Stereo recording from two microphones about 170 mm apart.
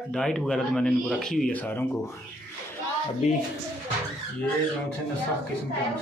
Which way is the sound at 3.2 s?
40° left (ahead or behind).